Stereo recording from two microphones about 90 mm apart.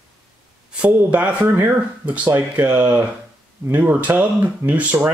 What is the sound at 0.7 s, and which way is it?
Speech, 15° right (ahead or behind).